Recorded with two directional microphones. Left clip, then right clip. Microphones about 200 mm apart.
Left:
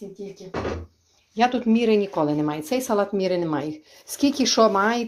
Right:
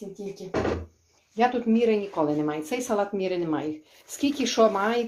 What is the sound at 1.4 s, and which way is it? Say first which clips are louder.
Speech: left 2 dB; 45° left (ahead or behind).